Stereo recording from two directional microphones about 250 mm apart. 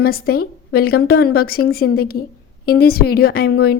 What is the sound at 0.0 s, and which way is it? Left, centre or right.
A woman's voice, left.